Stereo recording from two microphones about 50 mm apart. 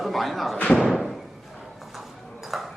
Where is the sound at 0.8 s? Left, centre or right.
Centre.